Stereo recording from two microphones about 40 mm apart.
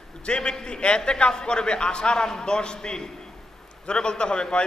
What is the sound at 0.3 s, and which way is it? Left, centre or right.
A man's voice, left.